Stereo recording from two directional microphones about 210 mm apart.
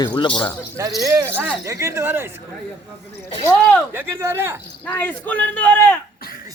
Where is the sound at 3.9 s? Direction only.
10° right (ahead or behind).